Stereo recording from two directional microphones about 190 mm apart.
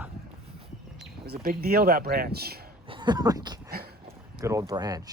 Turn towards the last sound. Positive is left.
turn(degrees=-20)  # may be behind; listen again after turning